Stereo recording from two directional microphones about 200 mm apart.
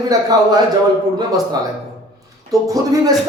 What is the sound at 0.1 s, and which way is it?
Speech, 20° right (ahead or behind).